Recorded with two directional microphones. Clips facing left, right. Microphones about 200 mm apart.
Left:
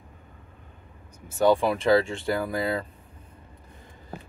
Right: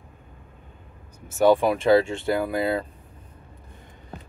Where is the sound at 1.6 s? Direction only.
20° right (ahead or behind).